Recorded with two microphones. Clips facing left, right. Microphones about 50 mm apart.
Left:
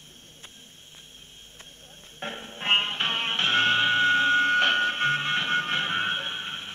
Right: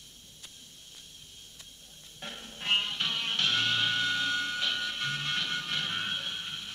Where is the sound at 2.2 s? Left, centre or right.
Left.